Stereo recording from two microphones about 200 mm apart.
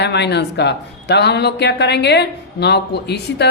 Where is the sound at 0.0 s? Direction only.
55° left (ahead or behind).